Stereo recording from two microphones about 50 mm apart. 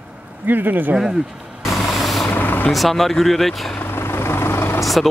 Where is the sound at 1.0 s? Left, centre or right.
Centre.